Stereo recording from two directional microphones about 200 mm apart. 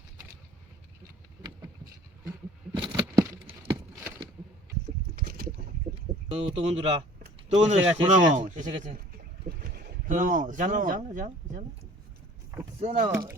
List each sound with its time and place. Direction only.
1.4 s vehicle: 15° right (ahead or behind)
2.7 s a sound: 25° right (ahead or behind)
3.7 s a sound: 10° right (ahead or behind)
5.1 s boat: 50° right (ahead or behind)
6.3 s speech: 30° right (ahead or behind)
12.8 s speech: 30° right (ahead or behind)
13.1 s speech: 10° right (ahead or behind)